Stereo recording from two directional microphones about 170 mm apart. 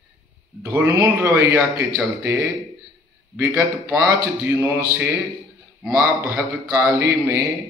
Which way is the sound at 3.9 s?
10° right (ahead or behind).